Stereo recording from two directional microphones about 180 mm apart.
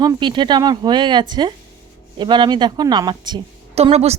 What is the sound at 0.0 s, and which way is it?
Speech, 25° right (ahead or behind).